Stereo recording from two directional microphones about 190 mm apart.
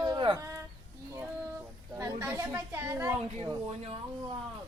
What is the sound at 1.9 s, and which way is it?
Speech, 15° right (ahead or behind).